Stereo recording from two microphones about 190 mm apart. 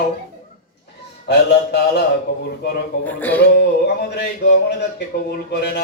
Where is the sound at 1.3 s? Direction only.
60° left (ahead or behind).